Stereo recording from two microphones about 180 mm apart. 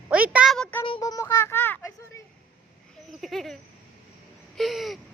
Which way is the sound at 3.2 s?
Centre (ahead or behind).